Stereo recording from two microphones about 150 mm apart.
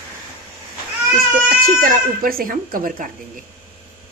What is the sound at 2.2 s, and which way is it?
Speech, 75° right (ahead or behind).